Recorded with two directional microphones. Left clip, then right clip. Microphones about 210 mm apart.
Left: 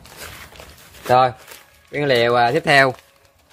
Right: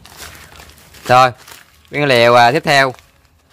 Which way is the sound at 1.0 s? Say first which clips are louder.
Right 5 dB; 35° right (ahead or behind).